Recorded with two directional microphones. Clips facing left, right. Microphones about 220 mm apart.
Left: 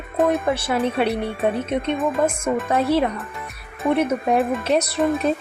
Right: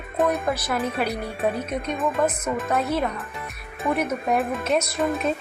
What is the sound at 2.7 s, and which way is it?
A woman's voice, 30° left (ahead or behind).